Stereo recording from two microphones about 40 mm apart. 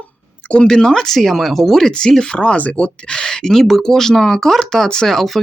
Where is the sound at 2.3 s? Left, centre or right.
Left; by 5.3 s centre.